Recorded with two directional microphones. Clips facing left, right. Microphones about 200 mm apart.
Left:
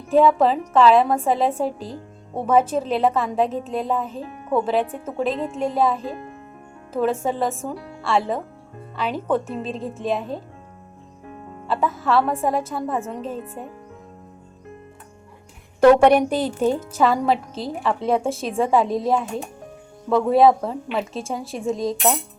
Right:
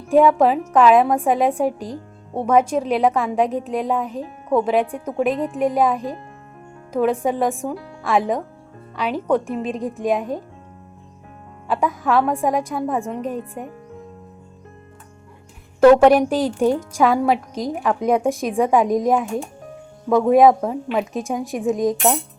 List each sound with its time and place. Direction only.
0.1 s speech: 15° right (ahead or behind)
11.7 s speech: 15° right (ahead or behind)
15.8 s speech: 5° right (ahead or behind)